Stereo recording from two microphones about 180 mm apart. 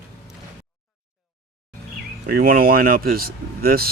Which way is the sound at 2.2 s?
55° right (ahead or behind).